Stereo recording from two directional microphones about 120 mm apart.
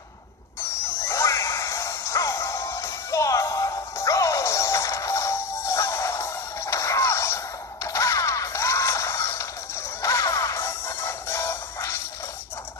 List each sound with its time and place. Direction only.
1.0 s music: 25° left (ahead or behind)